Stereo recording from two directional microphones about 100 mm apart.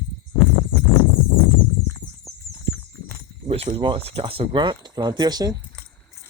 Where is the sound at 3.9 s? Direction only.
75° right (ahead or behind).